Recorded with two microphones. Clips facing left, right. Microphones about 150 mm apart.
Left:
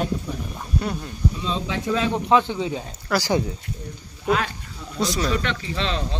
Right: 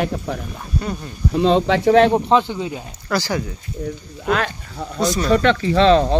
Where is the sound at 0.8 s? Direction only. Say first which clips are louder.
Right 1 dB; centre (ahead or behind).